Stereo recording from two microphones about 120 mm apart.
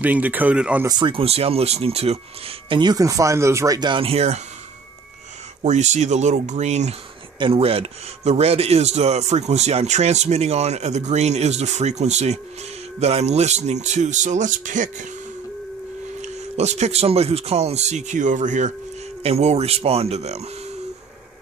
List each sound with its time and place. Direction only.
0.0 s speech: 15° right (ahead or behind)
0.8 s speech: 40° right (ahead or behind); by 2.8 s 55° right (ahead or behind)
2.8 s speech: 30° right (ahead or behind)
3.9 s speech: 55° right (ahead or behind)
5.6 s speech: 75° right (ahead or behind)
7.3 s speech: 50° right (ahead or behind); by 15.0 s 90° right
16.2 s speech: 70° right (ahead or behind); by 18.7 s 90° right
19.2 s speech: 60° right (ahead or behind)